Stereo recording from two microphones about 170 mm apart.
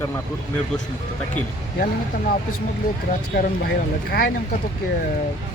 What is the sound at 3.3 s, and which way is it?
Speech, 65° left (ahead or behind).